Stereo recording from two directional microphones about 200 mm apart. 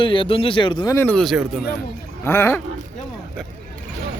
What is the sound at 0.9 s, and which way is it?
Speech, 5° left (ahead or behind).